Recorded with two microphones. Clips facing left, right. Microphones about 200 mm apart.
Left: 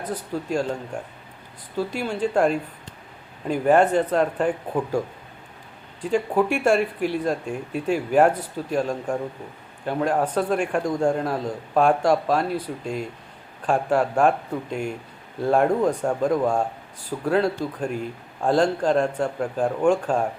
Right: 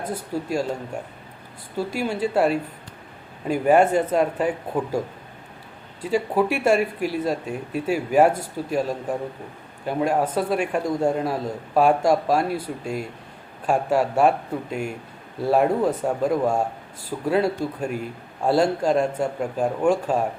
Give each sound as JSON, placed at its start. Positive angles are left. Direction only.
{"t": 0.1, "sound": "a man's voice", "side_deg": -10}
{"t": 1.8, "sound": "a man's voice", "side_deg": -10}